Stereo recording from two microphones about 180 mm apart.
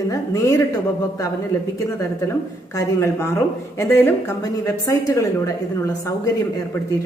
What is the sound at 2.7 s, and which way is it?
Speech, 15° left (ahead or behind).